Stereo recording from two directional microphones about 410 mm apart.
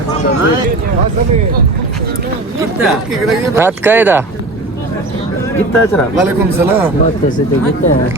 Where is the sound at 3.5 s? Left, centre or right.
Centre.